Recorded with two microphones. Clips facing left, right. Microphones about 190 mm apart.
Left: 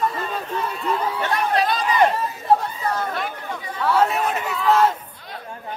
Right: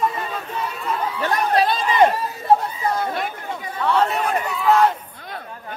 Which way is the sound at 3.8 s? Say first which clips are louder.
Even; 5° left (ahead or behind).